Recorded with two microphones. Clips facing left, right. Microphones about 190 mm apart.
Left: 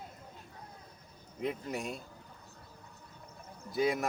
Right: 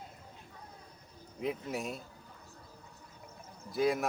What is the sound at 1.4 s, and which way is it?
Speech, centre (ahead or behind).